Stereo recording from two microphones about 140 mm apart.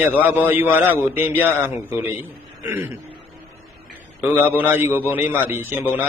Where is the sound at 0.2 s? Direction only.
15° right (ahead or behind).